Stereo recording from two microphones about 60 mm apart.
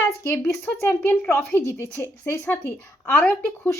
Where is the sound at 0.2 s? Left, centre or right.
Left.